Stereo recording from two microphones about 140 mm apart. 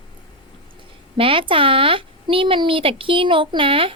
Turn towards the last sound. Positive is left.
turn(degrees=-40)  # may be behind; listen again after turning